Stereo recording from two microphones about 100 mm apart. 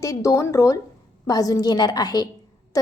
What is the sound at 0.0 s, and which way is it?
A woman's voice, 30° left (ahead or behind).